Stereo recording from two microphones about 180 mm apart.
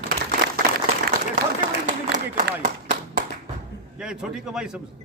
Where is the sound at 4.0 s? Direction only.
5° right (ahead or behind).